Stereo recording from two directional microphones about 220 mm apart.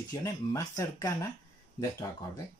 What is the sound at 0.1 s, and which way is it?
Speech, 15° left (ahead or behind).